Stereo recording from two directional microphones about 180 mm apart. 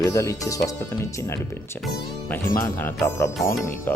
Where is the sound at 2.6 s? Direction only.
15° left (ahead or behind).